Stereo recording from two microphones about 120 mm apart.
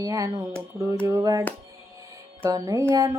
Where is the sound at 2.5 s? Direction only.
30° right (ahead or behind).